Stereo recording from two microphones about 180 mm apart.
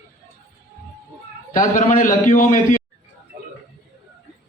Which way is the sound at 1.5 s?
45° left (ahead or behind).